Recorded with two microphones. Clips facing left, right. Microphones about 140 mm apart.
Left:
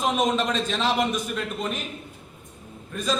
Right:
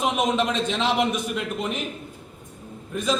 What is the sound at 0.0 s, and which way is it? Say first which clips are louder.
A man's voice: right 1 dB; 15° right (ahead or behind).